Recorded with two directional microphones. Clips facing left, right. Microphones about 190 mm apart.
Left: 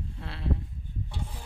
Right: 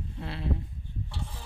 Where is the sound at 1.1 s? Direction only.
15° left (ahead or behind).